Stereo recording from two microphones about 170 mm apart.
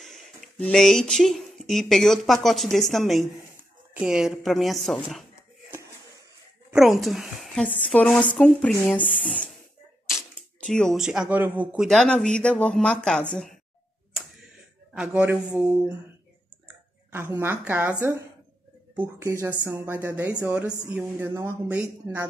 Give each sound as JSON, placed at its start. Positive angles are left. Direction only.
{"t": 0.0, "sound": "speech", "side_deg": 5}
{"t": 6.7, "sound": "speech", "side_deg": 0}
{"t": 10.6, "sound": "speech", "side_deg": 5}
{"t": 15.0, "sound": "speech", "side_deg": -5}
{"t": 17.1, "sound": "speech", "side_deg": -15}
{"t": 18.9, "sound": "speech", "side_deg": -15}